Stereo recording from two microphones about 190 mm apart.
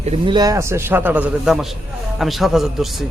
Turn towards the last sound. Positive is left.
turn(degrees=0)  # may be behind; listen again after turning